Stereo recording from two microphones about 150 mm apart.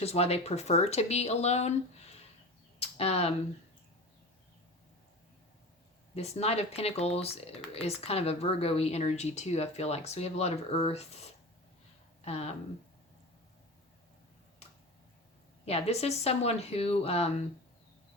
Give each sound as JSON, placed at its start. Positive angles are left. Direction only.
{"t": 0.0, "sound": "speech", "side_deg": 45}
{"t": 2.8, "sound": "speech", "side_deg": 45}
{"t": 6.1, "sound": "speech", "side_deg": 45}
{"t": 15.6, "sound": "speech", "side_deg": 45}